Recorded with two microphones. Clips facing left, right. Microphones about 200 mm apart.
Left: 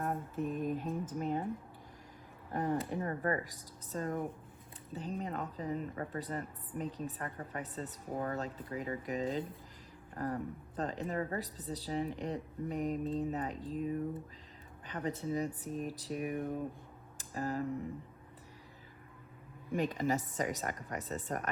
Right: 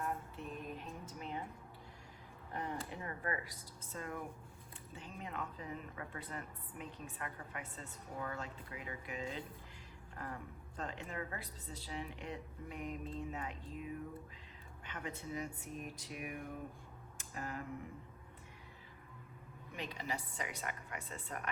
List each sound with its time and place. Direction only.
0.0 s a sound: 45° left (ahead or behind)
2.5 s a woman's voice: 45° left (ahead or behind)
19.7 s speech: 45° left (ahead or behind)